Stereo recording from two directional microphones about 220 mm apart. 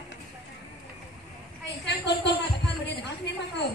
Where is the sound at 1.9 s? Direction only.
50° left (ahead or behind).